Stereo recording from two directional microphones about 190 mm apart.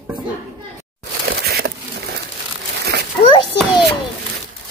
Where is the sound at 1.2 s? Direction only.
55° right (ahead or behind).